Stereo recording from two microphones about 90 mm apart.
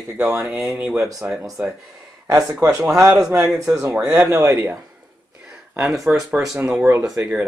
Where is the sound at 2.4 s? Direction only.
40° right (ahead or behind).